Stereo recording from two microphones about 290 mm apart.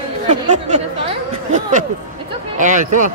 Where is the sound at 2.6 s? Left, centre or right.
Right.